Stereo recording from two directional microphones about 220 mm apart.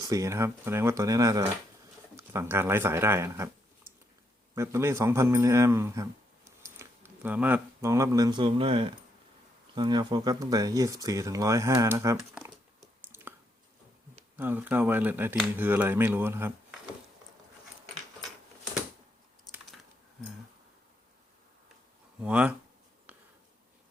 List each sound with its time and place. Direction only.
0.0 s speech: 15° right (ahead or behind)
4.5 s speech: 10° right (ahead or behind)
13.1 s squish: 10° right (ahead or behind)
14.3 s speech: 10° right (ahead or behind)
22.2 s speech: 5° right (ahead or behind)
23.1 s a sound: 5° right (ahead or behind)